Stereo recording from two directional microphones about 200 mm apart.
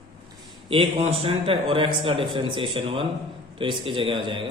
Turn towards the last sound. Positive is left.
turn(degrees=-25)  # may be behind; listen again after turning